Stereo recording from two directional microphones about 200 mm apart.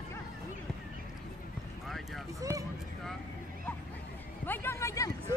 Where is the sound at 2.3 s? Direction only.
15° right (ahead or behind).